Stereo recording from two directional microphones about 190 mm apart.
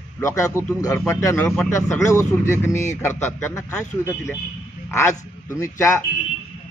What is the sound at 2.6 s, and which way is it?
Speech, 15° left (ahead or behind).